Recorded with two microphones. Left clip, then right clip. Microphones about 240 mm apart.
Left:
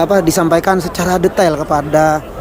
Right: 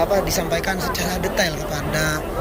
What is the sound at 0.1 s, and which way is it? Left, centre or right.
Speech, left.